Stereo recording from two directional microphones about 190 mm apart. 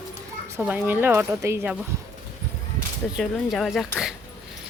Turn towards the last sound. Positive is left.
turn(degrees=0)  # may be behind; listen again after turning